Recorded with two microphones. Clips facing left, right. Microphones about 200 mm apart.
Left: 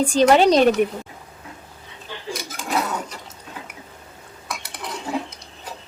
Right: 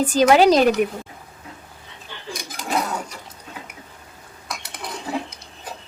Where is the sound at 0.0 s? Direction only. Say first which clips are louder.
Even; 5° right (ahead or behind).